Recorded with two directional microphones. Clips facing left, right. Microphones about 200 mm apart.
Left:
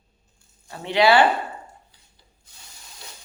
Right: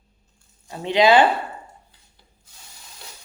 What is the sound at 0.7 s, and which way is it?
Speech, 20° right (ahead or behind).